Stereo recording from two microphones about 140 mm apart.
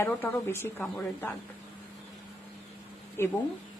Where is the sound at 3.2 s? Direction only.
20° left (ahead or behind).